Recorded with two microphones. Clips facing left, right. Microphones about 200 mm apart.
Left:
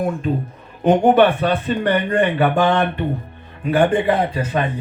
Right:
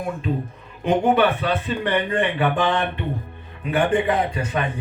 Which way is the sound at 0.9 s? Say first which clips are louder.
Left 5 dB; 45° left (ahead or behind).